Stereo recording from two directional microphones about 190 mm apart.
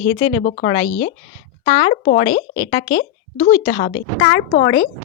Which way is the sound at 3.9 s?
85° left.